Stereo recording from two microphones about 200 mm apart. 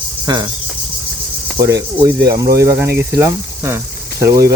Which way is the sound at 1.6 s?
15° right (ahead or behind).